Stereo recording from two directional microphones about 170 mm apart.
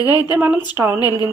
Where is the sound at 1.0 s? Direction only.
20° left (ahead or behind).